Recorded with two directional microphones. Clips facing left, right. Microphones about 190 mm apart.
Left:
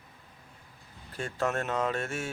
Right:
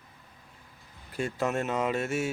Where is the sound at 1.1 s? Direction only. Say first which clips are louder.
Right 2 dB; 10° right (ahead or behind).